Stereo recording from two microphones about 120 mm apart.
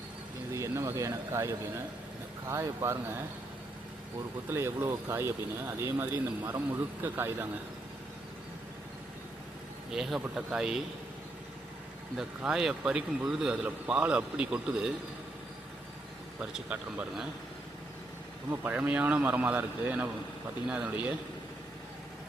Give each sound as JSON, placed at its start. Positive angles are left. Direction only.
{"t": 0.5, "sound": "speech", "side_deg": -25}
{"t": 2.5, "sound": "speech", "side_deg": -20}
{"t": 4.4, "sound": "speech", "side_deg": -20}
{"t": 9.9, "sound": "speech", "side_deg": 0}
{"t": 12.1, "sound": "a man's voice", "side_deg": -5}
{"t": 16.4, "sound": "a man's voice", "side_deg": -10}
{"t": 18.5, "sound": "a man's voice", "side_deg": -15}